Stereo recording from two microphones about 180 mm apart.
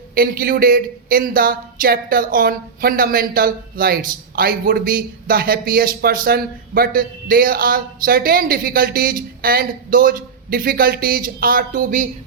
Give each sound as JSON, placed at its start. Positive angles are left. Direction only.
{"t": 0.1, "sound": "a woman's voice", "side_deg": -55}